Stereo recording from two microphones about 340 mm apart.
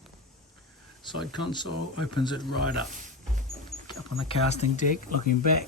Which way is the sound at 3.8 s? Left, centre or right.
Centre.